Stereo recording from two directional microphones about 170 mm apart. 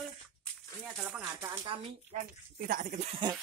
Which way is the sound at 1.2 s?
20° right (ahead or behind).